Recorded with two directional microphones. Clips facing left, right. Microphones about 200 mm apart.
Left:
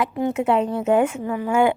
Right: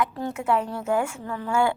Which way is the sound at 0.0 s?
20° left (ahead or behind).